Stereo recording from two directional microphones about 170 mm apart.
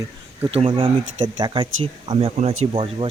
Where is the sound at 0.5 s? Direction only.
30° right (ahead or behind).